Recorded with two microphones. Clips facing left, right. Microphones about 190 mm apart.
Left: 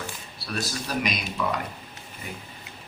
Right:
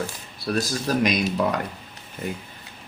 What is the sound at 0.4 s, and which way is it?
Speech, 45° right (ahead or behind).